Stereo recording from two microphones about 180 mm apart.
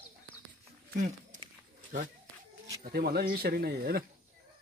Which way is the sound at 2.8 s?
55° right (ahead or behind).